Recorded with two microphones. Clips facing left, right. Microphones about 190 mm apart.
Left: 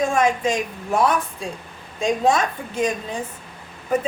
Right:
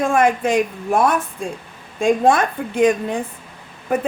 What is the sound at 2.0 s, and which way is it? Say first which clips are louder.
A woman's voice: right 4 dB; 55° right (ahead or behind).